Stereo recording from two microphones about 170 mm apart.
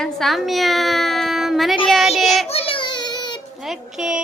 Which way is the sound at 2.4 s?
35° left (ahead or behind).